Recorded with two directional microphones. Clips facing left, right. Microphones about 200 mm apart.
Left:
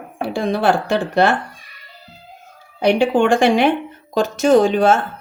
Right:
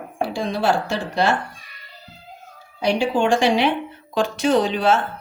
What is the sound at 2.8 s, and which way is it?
Speech, 60° left (ahead or behind).